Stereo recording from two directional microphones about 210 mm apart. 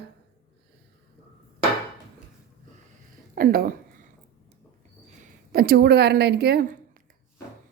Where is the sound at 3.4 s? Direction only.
45° right (ahead or behind).